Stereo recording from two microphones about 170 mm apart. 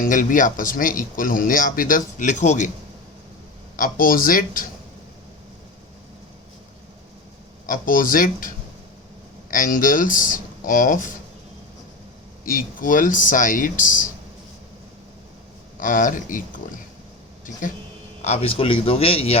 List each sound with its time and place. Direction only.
0.0 s speech: 50° left (ahead or behind)
3.8 s speech: 55° left (ahead or behind)
7.7 s speech: 55° left (ahead or behind)
12.5 s speech: 55° left (ahead or behind)
15.8 s speech: 50° left (ahead or behind)
18.2 s a man's voice: 40° left (ahead or behind)